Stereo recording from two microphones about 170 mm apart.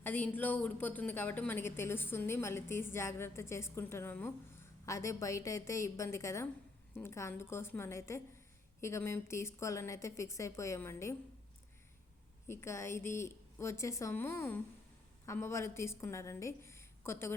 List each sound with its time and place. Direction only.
0.0 s a woman's voice: 10° left (ahead or behind)
12.5 s a woman's voice: 15° left (ahead or behind)